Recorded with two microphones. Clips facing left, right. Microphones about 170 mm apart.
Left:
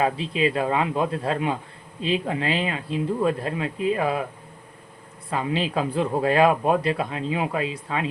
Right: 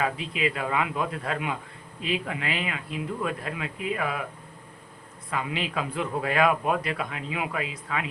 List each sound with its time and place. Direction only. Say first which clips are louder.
0.0 s speech: left 5 dB; 30° left (ahead or behind)
5.3 s speech: left 5 dB; 30° left (ahead or behind)